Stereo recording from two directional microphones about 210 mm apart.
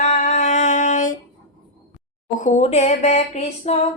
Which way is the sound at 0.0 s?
35° left (ahead or behind).